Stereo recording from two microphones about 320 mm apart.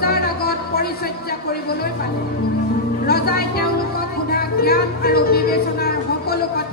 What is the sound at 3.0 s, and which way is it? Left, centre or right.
Music, left.